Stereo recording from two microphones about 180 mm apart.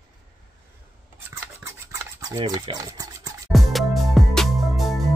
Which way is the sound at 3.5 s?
Centre (ahead or behind).